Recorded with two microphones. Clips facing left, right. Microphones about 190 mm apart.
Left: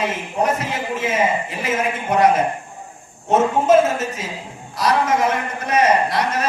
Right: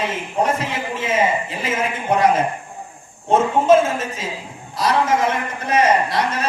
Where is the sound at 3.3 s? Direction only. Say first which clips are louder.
Even; 30° right (ahead or behind).